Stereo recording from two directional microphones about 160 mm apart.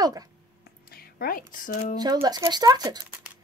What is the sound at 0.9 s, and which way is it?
Speech, 70° left (ahead or behind).